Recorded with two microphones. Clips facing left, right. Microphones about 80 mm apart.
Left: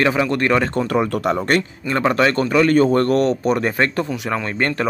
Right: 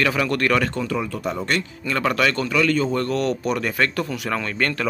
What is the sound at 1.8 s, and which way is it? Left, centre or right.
Speech, left.